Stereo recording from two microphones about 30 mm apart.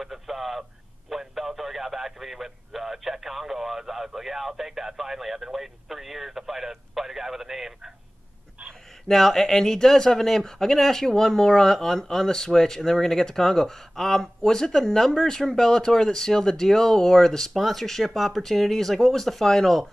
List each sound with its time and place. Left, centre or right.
0.0 s radio: centre
9.0 s speech: centre